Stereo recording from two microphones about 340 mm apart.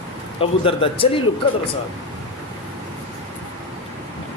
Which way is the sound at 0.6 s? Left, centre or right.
Centre.